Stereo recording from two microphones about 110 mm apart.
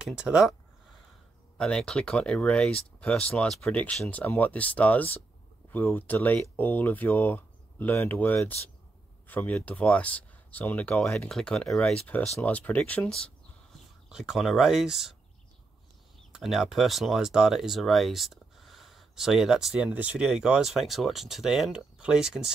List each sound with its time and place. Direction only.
0.0 s speech: 10° right (ahead or behind)
1.6 s speech: 5° left (ahead or behind)
14.0 s speech: 5° right (ahead or behind)
16.3 s speech: 5° right (ahead or behind)